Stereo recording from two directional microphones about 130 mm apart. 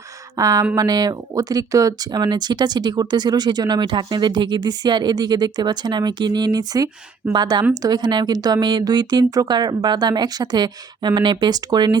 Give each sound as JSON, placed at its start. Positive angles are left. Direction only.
{"t": 0.3, "sound": "speech", "side_deg": -25}